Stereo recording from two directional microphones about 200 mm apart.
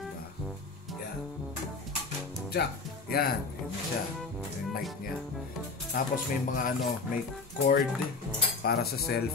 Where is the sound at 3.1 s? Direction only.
50° left (ahead or behind).